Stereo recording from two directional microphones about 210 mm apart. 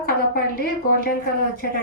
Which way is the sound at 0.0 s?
45° left (ahead or behind).